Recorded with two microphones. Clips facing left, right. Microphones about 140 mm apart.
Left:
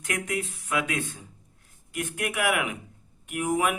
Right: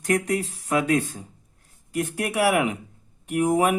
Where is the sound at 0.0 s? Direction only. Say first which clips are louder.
Right 7 dB; 35° right (ahead or behind).